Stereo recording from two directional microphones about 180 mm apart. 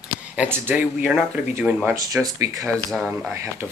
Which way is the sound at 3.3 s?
15° right (ahead or behind).